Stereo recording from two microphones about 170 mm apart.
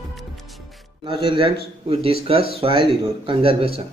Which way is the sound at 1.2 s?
30° right (ahead or behind).